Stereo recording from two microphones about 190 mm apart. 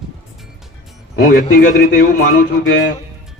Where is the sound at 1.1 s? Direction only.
55° left (ahead or behind).